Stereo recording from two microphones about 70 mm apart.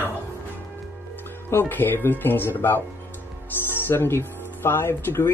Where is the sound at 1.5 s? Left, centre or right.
Left.